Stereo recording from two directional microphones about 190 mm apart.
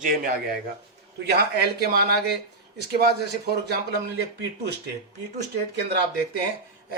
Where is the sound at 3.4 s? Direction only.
60° right (ahead or behind).